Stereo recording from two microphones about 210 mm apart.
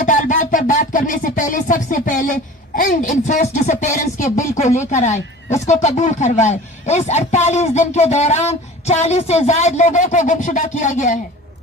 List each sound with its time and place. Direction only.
0.0 s music: 35° left (ahead or behind)
2.7 s speech: 35° left (ahead or behind)